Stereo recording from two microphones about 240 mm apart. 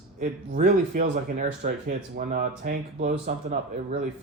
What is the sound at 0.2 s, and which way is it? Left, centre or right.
Speech, right.